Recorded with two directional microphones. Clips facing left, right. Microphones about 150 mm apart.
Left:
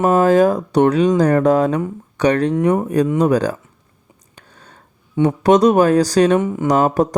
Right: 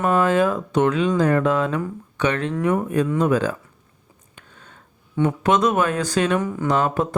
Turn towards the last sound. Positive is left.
turn(degrees=40)  # may be behind; listen again after turning